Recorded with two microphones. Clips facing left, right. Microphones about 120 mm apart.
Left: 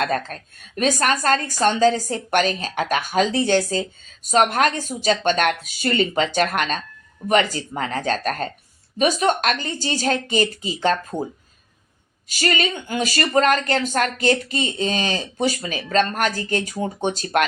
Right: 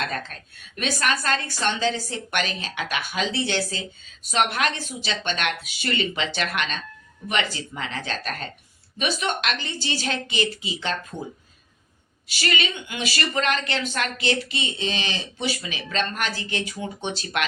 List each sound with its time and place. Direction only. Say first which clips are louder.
0.0 s a woman's voice: left 7 dB; 40° left (ahead or behind)
12.3 s a woman's voice: left 4 dB; 45° left (ahead or behind)